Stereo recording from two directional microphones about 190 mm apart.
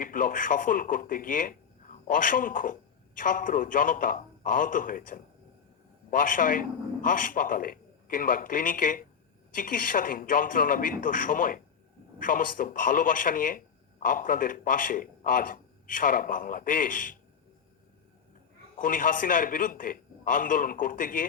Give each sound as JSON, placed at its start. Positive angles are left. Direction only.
{"t": 0.0, "sound": "a man's voice", "side_deg": 45}
{"t": 18.8, "sound": "a man's voice", "side_deg": 45}